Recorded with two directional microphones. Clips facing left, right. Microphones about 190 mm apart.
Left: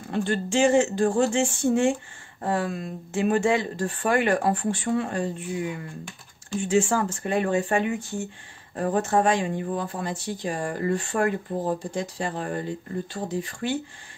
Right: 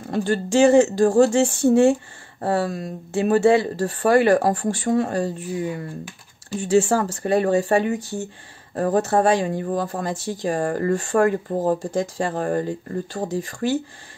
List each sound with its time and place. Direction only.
0.1 s speech: 40° right (ahead or behind)